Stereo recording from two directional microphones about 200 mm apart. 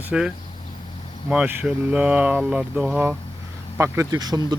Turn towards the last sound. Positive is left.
turn(degrees=-20)  # may be behind; listen again after turning